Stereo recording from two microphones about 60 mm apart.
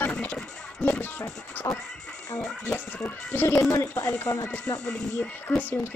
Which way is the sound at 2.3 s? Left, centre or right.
Left.